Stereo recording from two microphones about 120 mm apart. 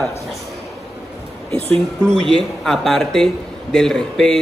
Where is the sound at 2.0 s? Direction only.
5° left (ahead or behind).